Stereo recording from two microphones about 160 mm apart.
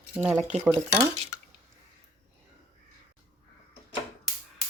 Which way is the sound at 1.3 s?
20° left (ahead or behind).